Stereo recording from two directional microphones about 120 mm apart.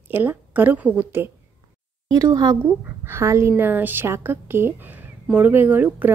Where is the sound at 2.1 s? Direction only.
30° right (ahead or behind).